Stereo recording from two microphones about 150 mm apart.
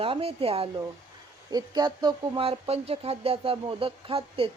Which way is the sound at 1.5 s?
25° right (ahead or behind).